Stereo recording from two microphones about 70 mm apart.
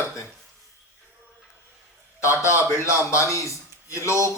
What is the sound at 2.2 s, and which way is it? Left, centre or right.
A man's voice, left.